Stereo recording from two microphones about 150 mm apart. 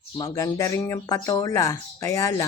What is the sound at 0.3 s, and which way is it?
Speech, 20° left (ahead or behind).